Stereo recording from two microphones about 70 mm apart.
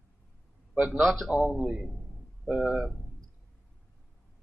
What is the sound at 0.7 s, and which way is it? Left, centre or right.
A man's voice, centre.